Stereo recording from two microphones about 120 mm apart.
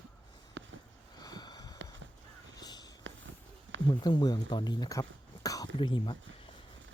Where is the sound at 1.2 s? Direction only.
35° left (ahead or behind).